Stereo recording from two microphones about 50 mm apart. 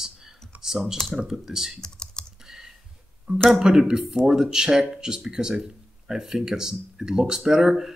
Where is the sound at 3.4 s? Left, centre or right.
Centre.